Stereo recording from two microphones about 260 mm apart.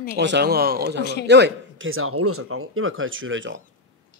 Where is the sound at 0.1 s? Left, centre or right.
Right.